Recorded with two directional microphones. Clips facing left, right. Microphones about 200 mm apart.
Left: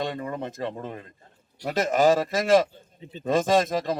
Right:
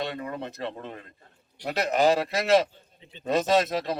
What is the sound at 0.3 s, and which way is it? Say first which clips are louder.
Speech: left 3 dB; 45° left (ahead or behind).